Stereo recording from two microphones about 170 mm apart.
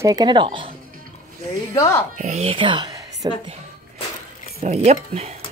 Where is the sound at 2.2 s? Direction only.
40° right (ahead or behind); by 3.3 s 25° right (ahead or behind).